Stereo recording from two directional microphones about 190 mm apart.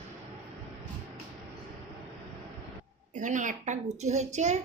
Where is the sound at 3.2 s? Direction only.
40° right (ahead or behind).